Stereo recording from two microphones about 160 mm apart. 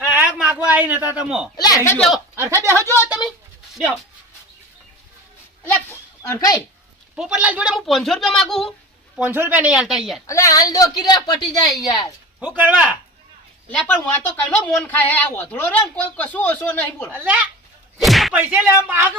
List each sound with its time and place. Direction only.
0.0 s a sound: 10° right (ahead or behind)
1.5 s a woman's voice: 25° left (ahead or behind)
2.0 s a woman's voice: centre (ahead or behind)
2.3 s speech: 15° right (ahead or behind)
3.1 s speech: 5° right (ahead or behind)
6.2 s speech: 20° left (ahead or behind)
7.2 s a woman's voice: 5° right (ahead or behind)
9.1 s a woman's voice: 10° right (ahead or behind)
10.2 s speech: 20° left (ahead or behind)
12.4 s speech: 10° right (ahead or behind)
13.7 s speech: 10° left (ahead or behind)
17.1 s speech: 10° right (ahead or behind)
17.9 s speech: centre (ahead or behind)